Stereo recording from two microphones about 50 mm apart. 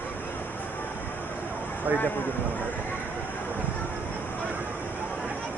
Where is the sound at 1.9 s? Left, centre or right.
Right.